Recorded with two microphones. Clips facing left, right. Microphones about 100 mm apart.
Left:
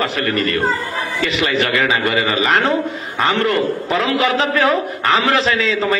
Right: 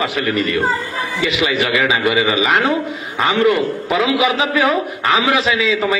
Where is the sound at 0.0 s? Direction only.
5° right (ahead or behind).